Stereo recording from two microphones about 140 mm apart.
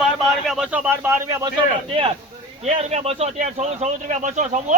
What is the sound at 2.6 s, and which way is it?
Speech, 50° right (ahead or behind).